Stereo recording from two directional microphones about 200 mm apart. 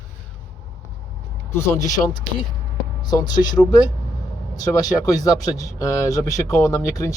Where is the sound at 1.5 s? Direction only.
15° left (ahead or behind).